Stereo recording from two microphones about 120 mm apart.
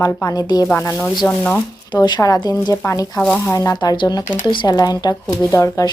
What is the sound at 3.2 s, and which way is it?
Speech, 10° left (ahead or behind).